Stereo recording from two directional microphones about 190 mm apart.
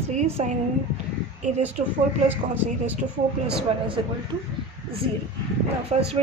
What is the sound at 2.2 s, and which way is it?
Speech, 10° right (ahead or behind).